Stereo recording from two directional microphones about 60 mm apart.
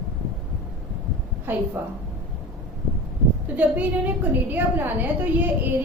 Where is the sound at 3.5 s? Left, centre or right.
Right.